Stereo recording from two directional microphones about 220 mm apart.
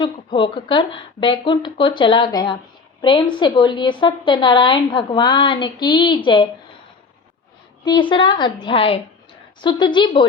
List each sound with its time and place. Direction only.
0.0 s a woman's voice: 20° left (ahead or behind)
7.9 s a woman's voice: 20° left (ahead or behind)